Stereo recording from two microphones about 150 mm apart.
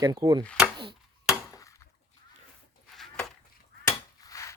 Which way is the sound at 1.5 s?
20° left (ahead or behind).